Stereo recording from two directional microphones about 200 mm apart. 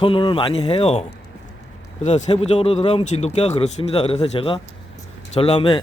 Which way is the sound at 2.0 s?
30° left (ahead or behind).